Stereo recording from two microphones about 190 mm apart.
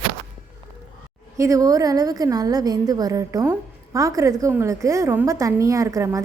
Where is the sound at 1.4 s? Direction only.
15° right (ahead or behind).